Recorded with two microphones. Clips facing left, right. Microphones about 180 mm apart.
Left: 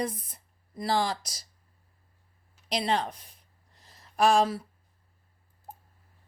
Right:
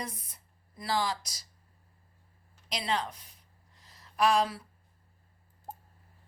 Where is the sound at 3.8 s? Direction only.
45° left (ahead or behind).